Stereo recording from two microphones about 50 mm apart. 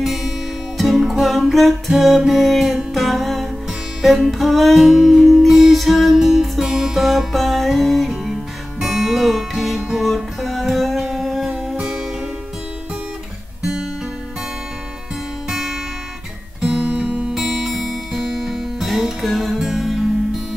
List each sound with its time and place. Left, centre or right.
0.0 s music: centre
11.1 s humming: centre
15.5 s music: centre
16.6 s guitar: right
17.3 s music: centre